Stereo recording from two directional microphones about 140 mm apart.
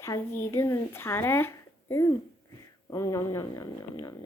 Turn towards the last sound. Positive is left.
turn(degrees=25)  # may be behind; listen again after turning